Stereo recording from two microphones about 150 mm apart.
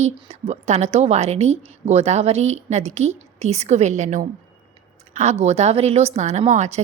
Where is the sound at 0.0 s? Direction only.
45° right (ahead or behind).